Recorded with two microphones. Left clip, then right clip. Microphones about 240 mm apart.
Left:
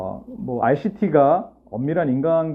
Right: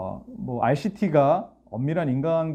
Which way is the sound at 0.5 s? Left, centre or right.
Right.